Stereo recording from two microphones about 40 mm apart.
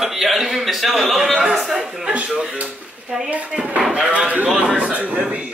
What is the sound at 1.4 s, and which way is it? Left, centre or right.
Speech, centre.